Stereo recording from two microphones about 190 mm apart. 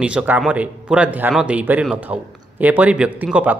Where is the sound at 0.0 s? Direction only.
5° right (ahead or behind).